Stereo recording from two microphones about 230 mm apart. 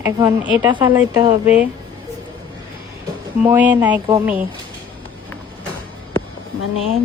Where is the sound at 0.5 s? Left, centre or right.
Centre.